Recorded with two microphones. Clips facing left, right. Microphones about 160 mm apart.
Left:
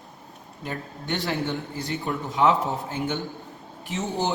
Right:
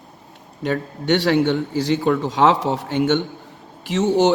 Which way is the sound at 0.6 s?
80° right.